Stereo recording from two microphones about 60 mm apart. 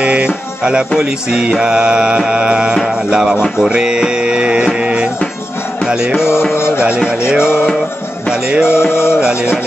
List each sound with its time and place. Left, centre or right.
0.0 s music: centre
6.5 s music: left
8.3 s music: centre
8.6 s music: left